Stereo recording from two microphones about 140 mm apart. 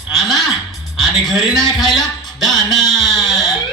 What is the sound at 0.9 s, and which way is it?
A man's voice, centre (ahead or behind).